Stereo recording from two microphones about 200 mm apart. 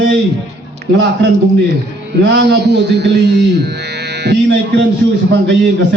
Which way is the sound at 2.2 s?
60° right (ahead or behind).